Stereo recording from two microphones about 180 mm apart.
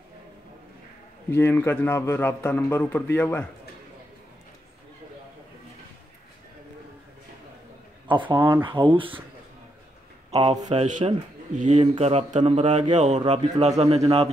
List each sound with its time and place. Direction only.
1.3 s a man's voice: 10° left (ahead or behind)
8.1 s speech: 25° right (ahead or behind)
10.3 s a man's voice: 30° right (ahead or behind)